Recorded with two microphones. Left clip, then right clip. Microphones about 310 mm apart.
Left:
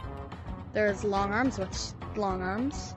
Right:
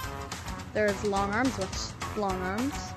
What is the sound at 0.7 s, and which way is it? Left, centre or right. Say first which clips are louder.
Speech: even; centre.